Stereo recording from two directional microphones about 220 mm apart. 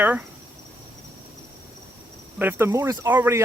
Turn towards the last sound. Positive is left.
turn(degrees=-10)  # may be behind; listen again after turning